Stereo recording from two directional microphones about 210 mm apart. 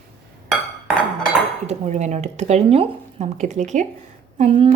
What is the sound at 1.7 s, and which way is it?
Speech, 35° right (ahead or behind).